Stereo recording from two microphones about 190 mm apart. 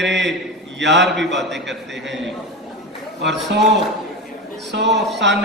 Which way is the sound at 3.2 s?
65° right (ahead or behind).